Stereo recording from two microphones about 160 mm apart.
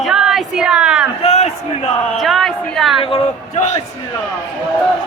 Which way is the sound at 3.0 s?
30° left (ahead or behind).